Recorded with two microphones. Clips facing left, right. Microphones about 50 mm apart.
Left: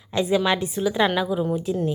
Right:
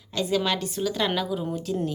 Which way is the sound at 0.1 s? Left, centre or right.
Left.